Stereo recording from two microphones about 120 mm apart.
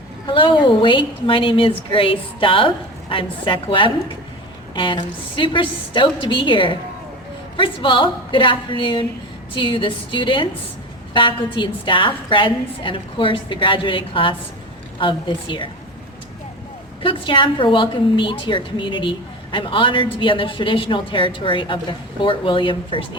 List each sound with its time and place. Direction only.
0.3 s a woman's voice: 40° left (ahead or behind)
17.0 s a woman's voice: 45° left (ahead or behind)